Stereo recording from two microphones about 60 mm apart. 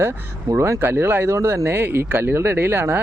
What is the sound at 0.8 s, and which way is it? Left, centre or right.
Speech, right.